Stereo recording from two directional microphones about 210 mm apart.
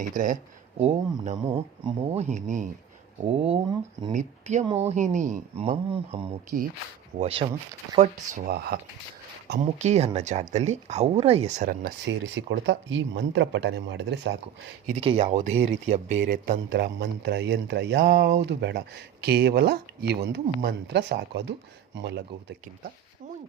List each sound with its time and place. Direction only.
0.0 s speech: 40° right (ahead or behind)
0.8 s speech: 30° right (ahead or behind)
4.1 s speech: 35° right (ahead or behind)
4.6 s speech: 15° right (ahead or behind)
4.9 s speech: 35° right (ahead or behind)
9.6 s speech: 35° right (ahead or behind)
12.0 s speech: 60° right (ahead or behind)
15.0 s speech: 30° right (ahead or behind)
16.3 s speech: 45° right (ahead or behind)